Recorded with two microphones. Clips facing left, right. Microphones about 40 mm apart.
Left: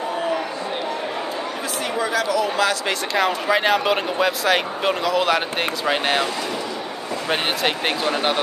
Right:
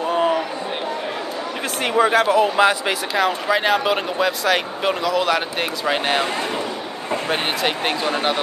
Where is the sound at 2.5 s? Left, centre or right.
Right.